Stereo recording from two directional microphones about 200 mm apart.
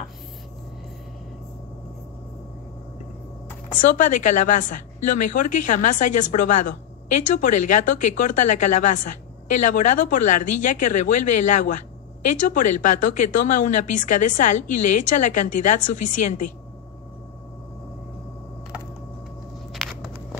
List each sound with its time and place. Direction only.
3.9 s speech: 40° left (ahead or behind)
19.7 s walk: centre (ahead or behind)